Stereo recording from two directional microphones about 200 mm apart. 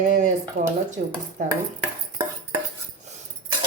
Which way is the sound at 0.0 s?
40° right (ahead or behind).